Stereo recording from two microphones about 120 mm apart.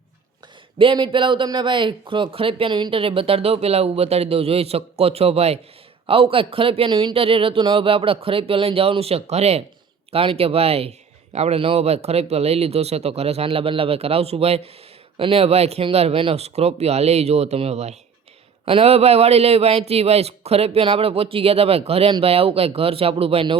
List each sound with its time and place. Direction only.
0.8 s speech: 45° right (ahead or behind)